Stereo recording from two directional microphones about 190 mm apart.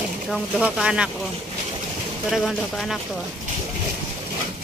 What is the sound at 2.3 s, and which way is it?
Speech, centre (ahead or behind).